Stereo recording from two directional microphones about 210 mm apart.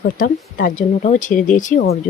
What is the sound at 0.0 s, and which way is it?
Speech, 40° left (ahead or behind).